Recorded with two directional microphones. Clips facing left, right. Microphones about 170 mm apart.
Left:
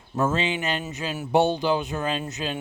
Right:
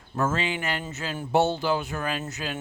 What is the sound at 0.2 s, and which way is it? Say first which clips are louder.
Speech: left 2 dB; 20° left (ahead or behind).